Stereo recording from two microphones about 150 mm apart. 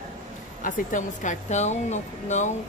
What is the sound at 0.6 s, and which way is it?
A woman's voice, 60° left (ahead or behind).